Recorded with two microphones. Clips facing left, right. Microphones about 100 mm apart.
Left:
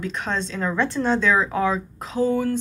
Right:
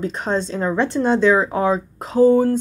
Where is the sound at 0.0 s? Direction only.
35° right (ahead or behind).